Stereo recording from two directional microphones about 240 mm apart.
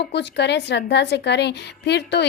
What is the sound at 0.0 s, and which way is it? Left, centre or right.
A woman's voice, left.